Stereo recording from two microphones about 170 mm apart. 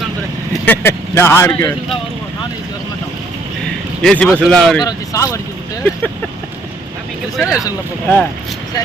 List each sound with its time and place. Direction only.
0.6 s speech: 10° left (ahead or behind)
4.0 s speech: 5° left (ahead or behind)
4.8 s speech: 20° left (ahead or behind)
7.3 s speech: 5° right (ahead or behind)
8.0 s speech: 10° left (ahead or behind)